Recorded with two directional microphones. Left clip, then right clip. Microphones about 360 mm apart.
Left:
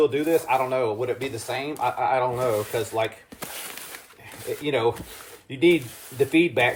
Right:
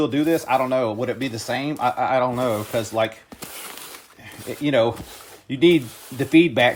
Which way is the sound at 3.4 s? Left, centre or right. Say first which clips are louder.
Left 1 dB; centre.